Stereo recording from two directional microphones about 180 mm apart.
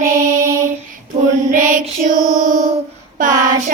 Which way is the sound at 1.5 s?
50° right (ahead or behind).